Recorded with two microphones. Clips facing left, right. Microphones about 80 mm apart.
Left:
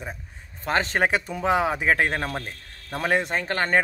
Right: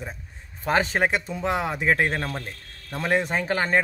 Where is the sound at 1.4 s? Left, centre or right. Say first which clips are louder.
Left 3 dB; centre.